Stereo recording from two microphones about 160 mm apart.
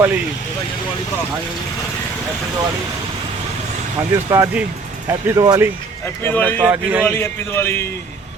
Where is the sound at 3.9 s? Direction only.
20° right (ahead or behind).